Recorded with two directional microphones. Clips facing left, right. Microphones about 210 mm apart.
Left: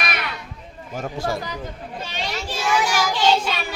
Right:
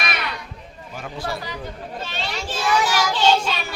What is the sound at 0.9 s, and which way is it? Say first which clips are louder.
Speech: left 4 dB; 45° left (ahead or behind).